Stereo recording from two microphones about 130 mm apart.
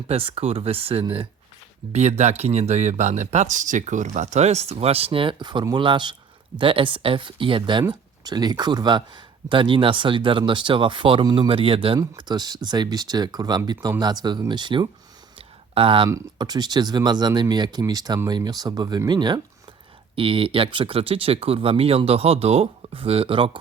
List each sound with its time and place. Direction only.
0.1 s speech: 45° right (ahead or behind)
1.9 s speech: 60° right (ahead or behind); by 11.9 s 45° right (ahead or behind)
11.9 s speech: 30° right (ahead or behind)
15.4 s a sound: 45° right (ahead or behind)
16.0 s speech: 25° right (ahead or behind); by 23.5 s 45° right (ahead or behind)